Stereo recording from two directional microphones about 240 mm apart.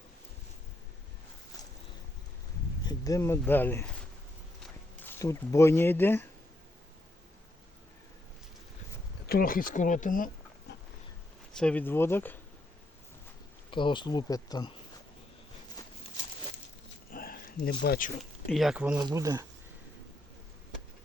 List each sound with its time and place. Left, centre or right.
2.8 s speech: centre
9.2 s speech: left
10.7 s pig: left
11.5 s speech: centre
13.7 s speech: centre
17.1 s a sound: left
18.2 s speech: centre
18.9 s speech: centre